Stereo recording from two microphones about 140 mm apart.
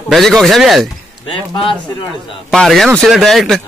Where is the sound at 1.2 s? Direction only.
35° left (ahead or behind).